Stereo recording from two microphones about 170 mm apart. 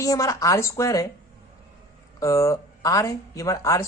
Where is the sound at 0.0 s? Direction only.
20° left (ahead or behind).